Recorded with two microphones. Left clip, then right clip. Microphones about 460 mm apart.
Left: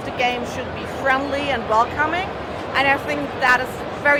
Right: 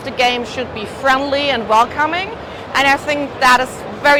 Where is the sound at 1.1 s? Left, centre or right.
Right.